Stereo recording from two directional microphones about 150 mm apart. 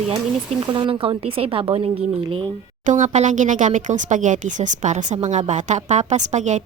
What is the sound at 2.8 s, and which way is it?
A woman's voice, 55° right (ahead or behind).